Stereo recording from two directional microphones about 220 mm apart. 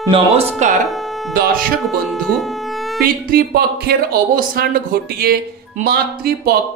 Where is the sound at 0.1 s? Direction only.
25° right (ahead or behind).